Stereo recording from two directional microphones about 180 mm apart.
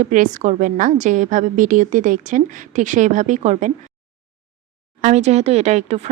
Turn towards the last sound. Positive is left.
turn(degrees=-40)  # may be behind; listen again after turning